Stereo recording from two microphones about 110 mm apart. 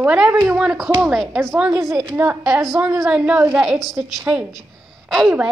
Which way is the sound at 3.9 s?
10° right (ahead or behind).